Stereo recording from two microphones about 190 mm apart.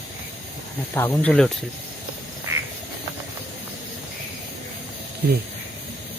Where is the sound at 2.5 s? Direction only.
15° right (ahead or behind).